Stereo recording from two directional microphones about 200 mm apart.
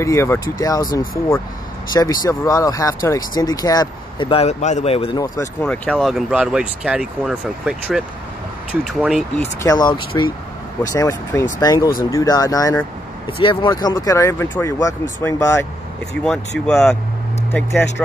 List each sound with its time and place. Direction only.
0.0 s speech: 15° left (ahead or behind)
5.6 s speech: 5° left (ahead or behind)
9.4 s speech: 15° left (ahead or behind)